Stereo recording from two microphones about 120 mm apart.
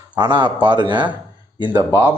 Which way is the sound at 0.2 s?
40° right (ahead or behind).